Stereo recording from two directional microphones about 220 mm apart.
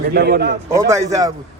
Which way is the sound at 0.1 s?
45° right (ahead or behind).